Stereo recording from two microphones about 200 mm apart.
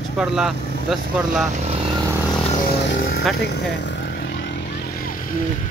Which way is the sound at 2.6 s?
55° left (ahead or behind).